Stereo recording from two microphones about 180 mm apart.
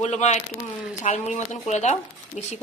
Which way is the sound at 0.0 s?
40° left (ahead or behind).